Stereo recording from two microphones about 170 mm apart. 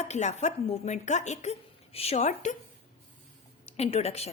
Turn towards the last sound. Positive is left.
turn(degrees=40)  # may be behind; listen again after turning